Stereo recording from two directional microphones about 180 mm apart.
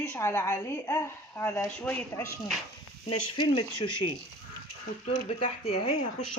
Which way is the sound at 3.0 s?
25° left (ahead or behind).